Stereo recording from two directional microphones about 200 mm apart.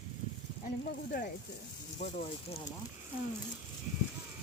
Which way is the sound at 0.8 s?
45° left (ahead or behind).